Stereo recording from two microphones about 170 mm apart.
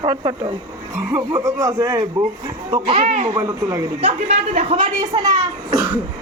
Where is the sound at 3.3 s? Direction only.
20° right (ahead or behind).